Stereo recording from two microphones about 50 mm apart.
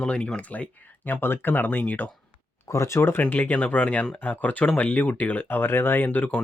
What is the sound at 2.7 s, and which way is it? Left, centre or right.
Speech, left.